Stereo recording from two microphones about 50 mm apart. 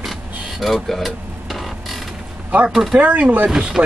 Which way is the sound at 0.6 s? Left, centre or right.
Centre.